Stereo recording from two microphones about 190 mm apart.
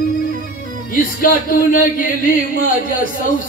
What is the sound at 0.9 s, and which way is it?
A man's voice, 45° left (ahead or behind).